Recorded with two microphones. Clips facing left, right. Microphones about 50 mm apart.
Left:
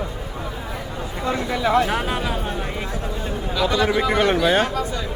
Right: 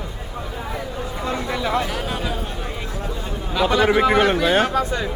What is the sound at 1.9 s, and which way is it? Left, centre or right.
Speech, left.